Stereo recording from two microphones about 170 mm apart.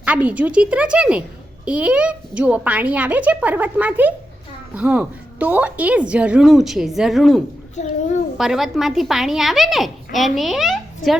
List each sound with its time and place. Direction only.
0.0 s a woman's voice: 10° right (ahead or behind)
7.8 s a child's voice: 45° left (ahead or behind)
8.4 s a woman's voice: centre (ahead or behind)